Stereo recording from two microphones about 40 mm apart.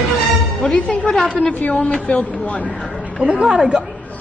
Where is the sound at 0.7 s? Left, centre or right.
Left.